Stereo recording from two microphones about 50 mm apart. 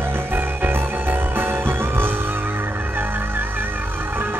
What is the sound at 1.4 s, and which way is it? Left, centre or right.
Music, right.